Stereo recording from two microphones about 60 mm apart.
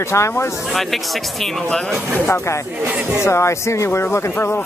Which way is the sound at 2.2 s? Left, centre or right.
Left.